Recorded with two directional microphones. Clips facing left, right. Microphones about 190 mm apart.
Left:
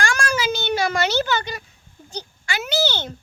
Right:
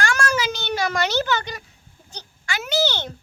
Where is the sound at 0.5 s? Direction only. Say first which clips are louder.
Left 2 dB; 25° left (ahead or behind).